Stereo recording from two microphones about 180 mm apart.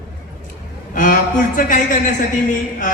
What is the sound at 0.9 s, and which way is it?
Speech, 50° left (ahead or behind).